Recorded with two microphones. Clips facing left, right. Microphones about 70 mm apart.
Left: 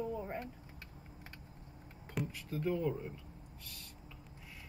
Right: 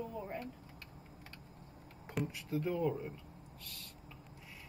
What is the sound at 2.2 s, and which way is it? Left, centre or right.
Speech, centre.